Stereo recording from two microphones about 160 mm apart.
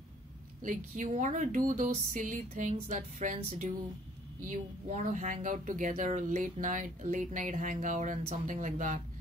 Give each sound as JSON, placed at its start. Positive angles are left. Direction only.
{"t": 0.7, "sound": "speech", "side_deg": -50}